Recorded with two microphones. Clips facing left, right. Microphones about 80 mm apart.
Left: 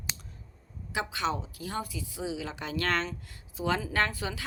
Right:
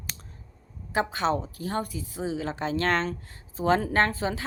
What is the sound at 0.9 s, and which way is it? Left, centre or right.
A woman's voice, right.